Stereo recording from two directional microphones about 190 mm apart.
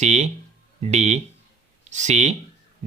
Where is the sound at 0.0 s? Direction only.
35° right (ahead or behind).